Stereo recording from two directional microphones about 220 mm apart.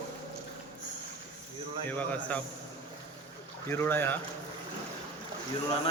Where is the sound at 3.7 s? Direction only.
10° left (ahead or behind).